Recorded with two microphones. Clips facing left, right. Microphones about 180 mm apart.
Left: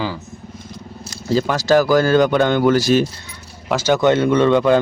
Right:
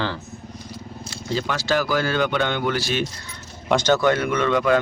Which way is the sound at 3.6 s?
5° left (ahead or behind).